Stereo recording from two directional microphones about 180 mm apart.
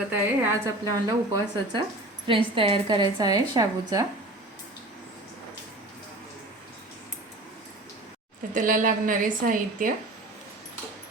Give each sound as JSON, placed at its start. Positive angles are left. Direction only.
{"t": 0.1, "sound": "a woman's voice", "side_deg": -15}
{"t": 8.5, "sound": "a woman's voice", "side_deg": -50}